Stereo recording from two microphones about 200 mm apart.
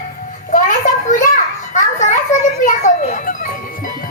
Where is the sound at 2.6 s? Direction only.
40° left (ahead or behind).